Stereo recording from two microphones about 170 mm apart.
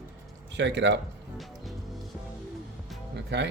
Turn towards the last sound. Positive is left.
turn(degrees=-85)